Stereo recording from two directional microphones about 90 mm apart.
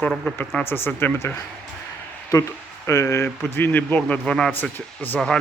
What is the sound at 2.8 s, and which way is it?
Speech, 35° left (ahead or behind).